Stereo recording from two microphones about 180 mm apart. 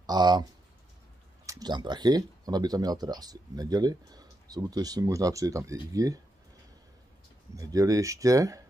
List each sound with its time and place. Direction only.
0.0 s speech: 25° right (ahead or behind)
7.5 s speech: 20° right (ahead or behind)